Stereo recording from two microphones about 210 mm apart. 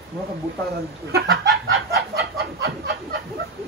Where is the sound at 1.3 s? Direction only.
65° right (ahead or behind); by 2.9 s 50° right (ahead or behind).